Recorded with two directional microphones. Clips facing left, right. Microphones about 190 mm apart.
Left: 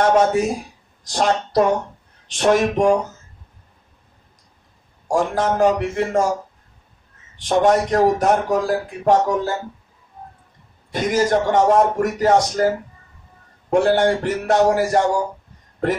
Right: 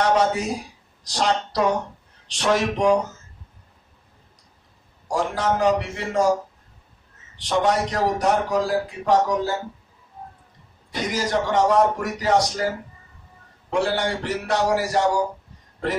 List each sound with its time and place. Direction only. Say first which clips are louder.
0.0 s a man's voice: left 4 dB; 50° left (ahead or behind)
5.0 s a man's voice: left 4 dB; 50° left (ahead or behind)
7.3 s a man's voice: left 5 dB; 50° left (ahead or behind)
10.9 s a man's voice: left 6 dB; 50° left (ahead or behind)
13.7 s a man's voice: left 7 dB; 50° left (ahead or behind)